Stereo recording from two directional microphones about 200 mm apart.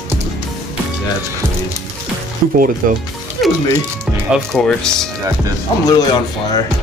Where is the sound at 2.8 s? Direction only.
45° right (ahead or behind).